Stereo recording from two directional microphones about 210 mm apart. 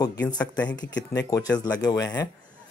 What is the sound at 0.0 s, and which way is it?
Speech, 15° left (ahead or behind).